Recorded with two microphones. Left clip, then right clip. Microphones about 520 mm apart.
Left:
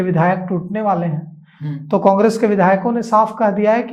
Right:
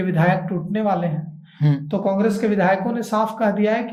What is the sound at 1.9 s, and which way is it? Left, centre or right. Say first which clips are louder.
Speech: left 9 dB; left.